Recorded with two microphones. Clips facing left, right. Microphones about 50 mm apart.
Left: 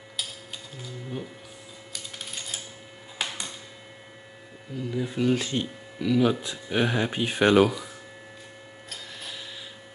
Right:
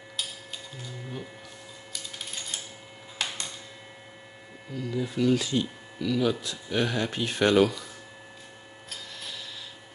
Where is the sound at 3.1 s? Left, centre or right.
Centre.